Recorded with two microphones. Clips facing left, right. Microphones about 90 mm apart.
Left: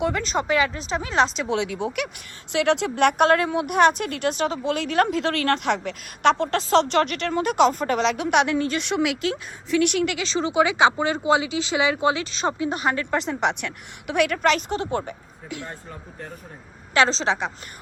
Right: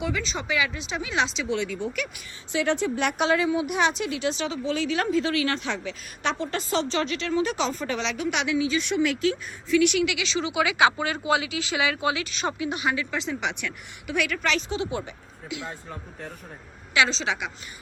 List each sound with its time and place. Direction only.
0.0 s speech: 50° left (ahead or behind)
1.5 s a woman's voice: 65° left (ahead or behind)
2.5 s a woman's voice: 85° left; by 5.0 s 55° left (ahead or behind)
5.1 s a woman's voice: 65° left (ahead or behind); by 15.7 s 45° left (ahead or behind)
16.9 s speech: 35° left (ahead or behind)